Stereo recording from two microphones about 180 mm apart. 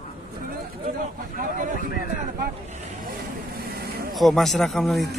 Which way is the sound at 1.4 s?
45° right (ahead or behind).